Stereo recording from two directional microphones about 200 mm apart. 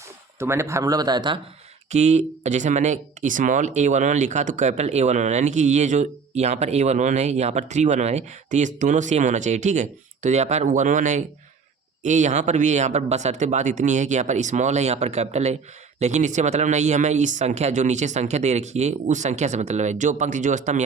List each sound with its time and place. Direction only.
0.3 s speech: 15° right (ahead or behind)
1.9 s speech: 35° right (ahead or behind)